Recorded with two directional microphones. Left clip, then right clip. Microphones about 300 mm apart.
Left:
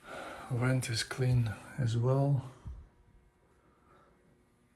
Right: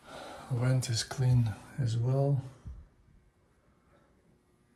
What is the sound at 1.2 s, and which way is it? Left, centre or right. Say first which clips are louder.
Speech: even; centre.